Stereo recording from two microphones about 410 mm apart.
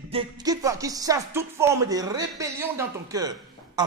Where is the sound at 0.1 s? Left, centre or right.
Centre.